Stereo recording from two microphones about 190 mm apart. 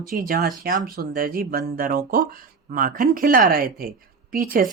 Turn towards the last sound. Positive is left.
turn(degrees=-45)  # may be behind; listen again after turning